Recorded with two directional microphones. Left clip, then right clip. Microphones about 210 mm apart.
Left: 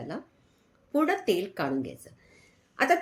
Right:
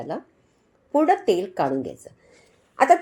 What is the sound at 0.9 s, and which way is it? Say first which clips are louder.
Speech: right 7 dB; centre (ahead or behind).